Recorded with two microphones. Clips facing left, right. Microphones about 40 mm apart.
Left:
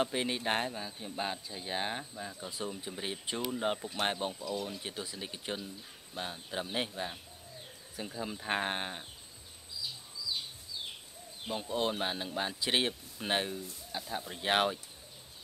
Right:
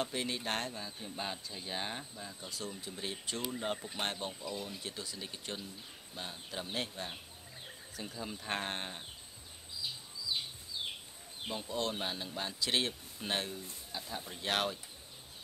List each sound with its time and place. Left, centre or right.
0.0 s a man's voice: centre
4.3 s speech: centre
4.6 s a man's voice: centre
11.5 s a man's voice: centre